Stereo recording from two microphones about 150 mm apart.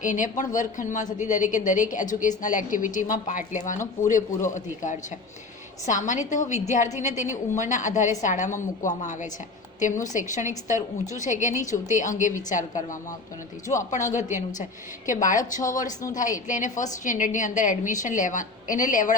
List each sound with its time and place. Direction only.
0.0 s a woman's voice: 55° left (ahead or behind)